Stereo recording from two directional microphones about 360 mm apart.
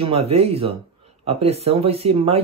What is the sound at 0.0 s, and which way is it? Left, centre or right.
Speech, centre.